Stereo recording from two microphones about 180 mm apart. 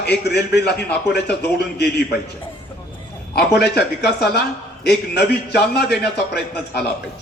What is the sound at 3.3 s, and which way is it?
A man's voice, 65° left (ahead or behind).